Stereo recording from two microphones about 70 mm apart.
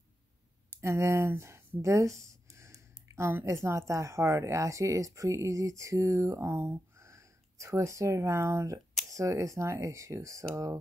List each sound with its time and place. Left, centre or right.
0.7 s speech: right